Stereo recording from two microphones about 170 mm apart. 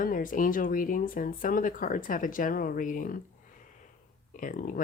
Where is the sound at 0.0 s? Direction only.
55° left (ahead or behind).